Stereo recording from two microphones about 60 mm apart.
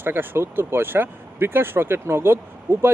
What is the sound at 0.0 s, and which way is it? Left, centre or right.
Speech, right.